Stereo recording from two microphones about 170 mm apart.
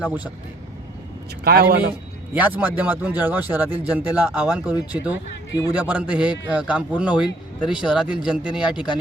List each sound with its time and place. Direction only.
0.0 s a man's voice: 10° right (ahead or behind)
1.5 s a man's voice: 65° right (ahead or behind)
2.3 s a man's voice: 10° right (ahead or behind)